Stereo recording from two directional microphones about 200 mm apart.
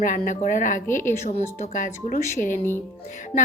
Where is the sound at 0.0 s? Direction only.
40° left (ahead or behind).